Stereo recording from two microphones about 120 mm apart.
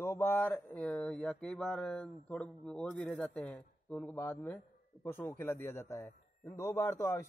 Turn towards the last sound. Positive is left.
turn(degrees=20)  # may be behind; listen again after turning